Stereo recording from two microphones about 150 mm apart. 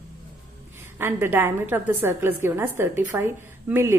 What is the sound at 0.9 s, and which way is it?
A woman's voice, 15° right (ahead or behind).